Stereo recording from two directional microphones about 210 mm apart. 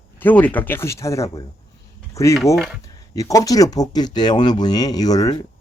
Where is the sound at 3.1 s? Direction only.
15° left (ahead or behind).